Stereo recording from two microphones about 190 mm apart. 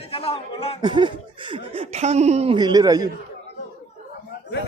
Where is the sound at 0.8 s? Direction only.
25° right (ahead or behind).